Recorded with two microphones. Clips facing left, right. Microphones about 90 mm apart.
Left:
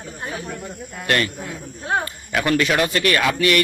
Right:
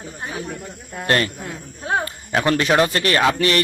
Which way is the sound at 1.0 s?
30° right (ahead or behind).